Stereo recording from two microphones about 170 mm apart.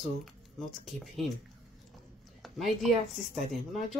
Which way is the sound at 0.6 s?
Centre (ahead or behind).